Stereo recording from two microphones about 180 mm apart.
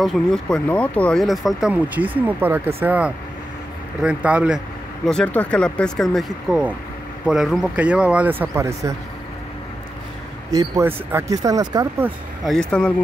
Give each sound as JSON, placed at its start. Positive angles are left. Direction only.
{"t": 0.0, "sound": "speech", "side_deg": 0}
{"t": 5.0, "sound": "speech", "side_deg": 5}
{"t": 10.5, "sound": "speech", "side_deg": -15}
{"t": 12.4, "sound": "speech", "side_deg": 5}